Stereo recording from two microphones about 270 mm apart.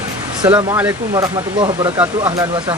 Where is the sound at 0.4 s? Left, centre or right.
Centre.